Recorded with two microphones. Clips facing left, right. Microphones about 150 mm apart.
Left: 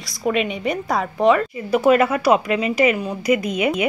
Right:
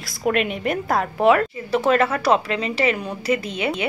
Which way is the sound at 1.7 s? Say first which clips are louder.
Left 4 dB; 10° left (ahead or behind).